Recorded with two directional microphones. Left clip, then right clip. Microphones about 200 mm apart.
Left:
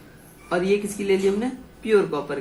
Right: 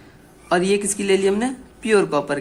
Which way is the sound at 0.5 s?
50° right (ahead or behind).